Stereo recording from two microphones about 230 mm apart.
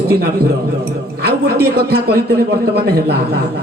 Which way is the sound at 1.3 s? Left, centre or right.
Right.